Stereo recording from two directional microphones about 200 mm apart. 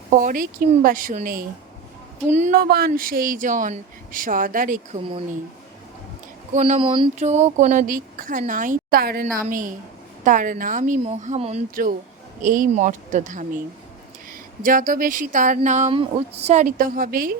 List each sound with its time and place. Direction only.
0.1 s speech: 40° right (ahead or behind)
4.9 s speech: 25° right (ahead or behind)
6.5 s speech: 35° right (ahead or behind)
14.6 s speech: 45° right (ahead or behind)